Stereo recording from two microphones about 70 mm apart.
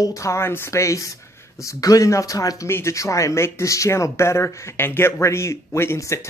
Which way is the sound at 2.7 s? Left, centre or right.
Left.